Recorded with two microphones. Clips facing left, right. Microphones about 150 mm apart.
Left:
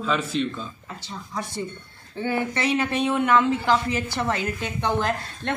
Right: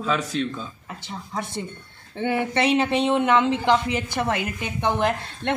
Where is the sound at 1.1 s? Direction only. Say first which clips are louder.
Right 2 dB; 25° right (ahead or behind).